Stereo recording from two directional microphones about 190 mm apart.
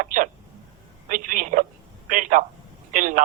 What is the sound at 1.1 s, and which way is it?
Telephone, 45° right (ahead or behind).